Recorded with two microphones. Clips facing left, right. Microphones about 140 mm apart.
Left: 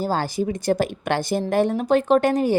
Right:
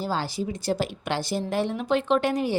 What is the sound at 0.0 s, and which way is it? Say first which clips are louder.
A woman's voice: left 5 dB; 45° left (ahead or behind).